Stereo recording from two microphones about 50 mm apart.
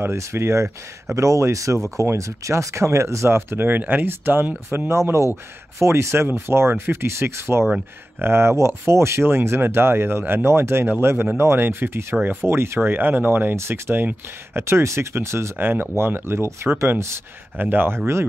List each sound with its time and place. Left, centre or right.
0.0 s speech: right
1.1 s speech: right
3.6 s speech: right
5.8 s speech: right
13.6 s speech: right
15.5 s speech: right
16.0 s speech: right
17.6 s speech: right